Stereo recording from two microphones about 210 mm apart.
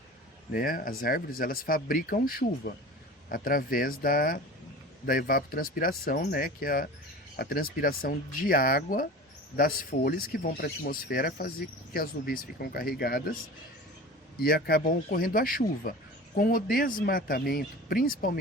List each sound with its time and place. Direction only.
0.5 s speech: 45° left (ahead or behind)
14.3 s speech: 45° left (ahead or behind)